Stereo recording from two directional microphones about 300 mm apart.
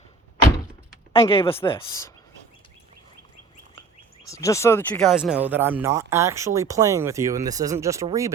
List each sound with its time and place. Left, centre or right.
1.1 s speech: centre
4.3 s speech: centre